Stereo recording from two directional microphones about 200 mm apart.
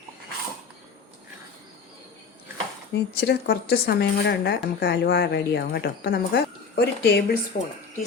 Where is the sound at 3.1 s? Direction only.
55° left (ahead or behind).